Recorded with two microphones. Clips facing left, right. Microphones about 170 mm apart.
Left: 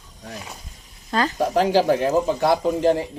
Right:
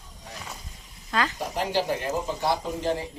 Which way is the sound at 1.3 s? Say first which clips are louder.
Left 9 dB; 90° left.